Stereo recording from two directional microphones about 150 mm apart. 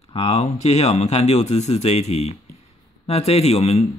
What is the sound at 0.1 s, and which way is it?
A man's voice, 40° left (ahead or behind).